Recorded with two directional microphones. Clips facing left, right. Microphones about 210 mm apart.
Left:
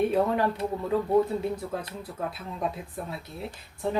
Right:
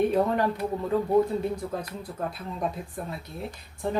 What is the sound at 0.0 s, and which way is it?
Speech, 5° left (ahead or behind).